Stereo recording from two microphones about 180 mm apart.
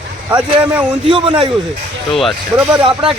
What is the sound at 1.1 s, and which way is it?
Speech, 30° right (ahead or behind).